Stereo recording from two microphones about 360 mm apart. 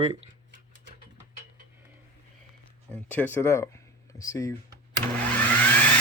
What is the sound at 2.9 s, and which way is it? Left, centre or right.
Speech, centre.